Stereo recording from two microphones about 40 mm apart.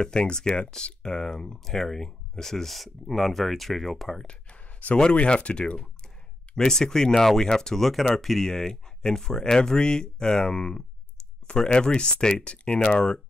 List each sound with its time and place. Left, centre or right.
0.0 s speech: left
4.3 s a sound: left
5.1 s speech: left
6.5 s speech: centre